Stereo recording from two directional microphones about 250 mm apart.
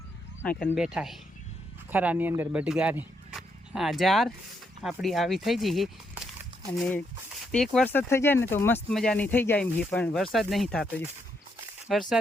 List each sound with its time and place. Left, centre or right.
0.4 s speech: centre